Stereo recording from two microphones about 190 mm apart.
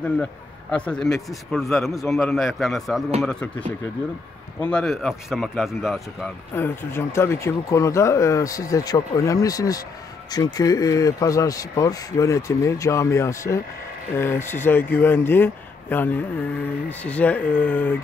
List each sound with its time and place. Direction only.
0.0 s speech: 5° left (ahead or behind)
6.5 s speech: 10° left (ahead or behind)